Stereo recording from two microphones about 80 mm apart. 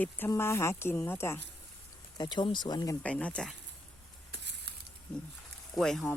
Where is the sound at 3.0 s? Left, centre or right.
Centre.